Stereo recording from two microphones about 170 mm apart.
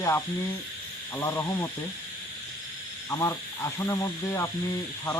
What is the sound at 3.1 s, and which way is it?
Speech, 15° left (ahead or behind).